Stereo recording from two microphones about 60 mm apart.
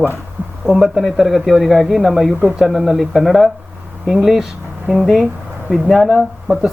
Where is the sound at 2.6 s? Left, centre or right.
Centre.